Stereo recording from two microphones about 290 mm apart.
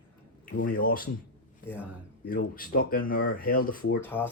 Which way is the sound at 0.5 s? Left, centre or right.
Left.